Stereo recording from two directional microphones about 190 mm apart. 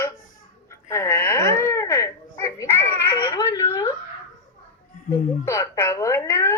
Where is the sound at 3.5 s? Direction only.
15° left (ahead or behind).